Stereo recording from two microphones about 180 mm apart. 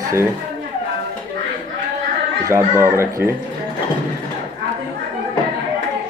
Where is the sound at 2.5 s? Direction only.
15° right (ahead or behind).